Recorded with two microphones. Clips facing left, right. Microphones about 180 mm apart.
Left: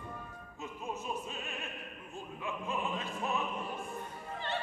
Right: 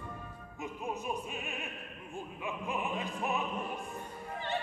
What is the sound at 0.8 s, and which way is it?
Opera, 15° right (ahead or behind).